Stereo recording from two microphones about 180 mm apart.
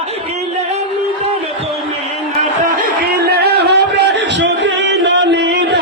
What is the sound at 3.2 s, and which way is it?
Music, 65° right (ahead or behind).